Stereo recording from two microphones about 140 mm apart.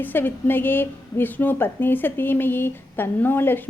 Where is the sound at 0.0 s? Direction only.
15° left (ahead or behind).